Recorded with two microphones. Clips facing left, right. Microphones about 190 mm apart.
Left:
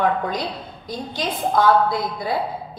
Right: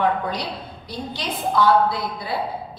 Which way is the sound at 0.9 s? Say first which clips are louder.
Left 3 dB; 45° left (ahead or behind).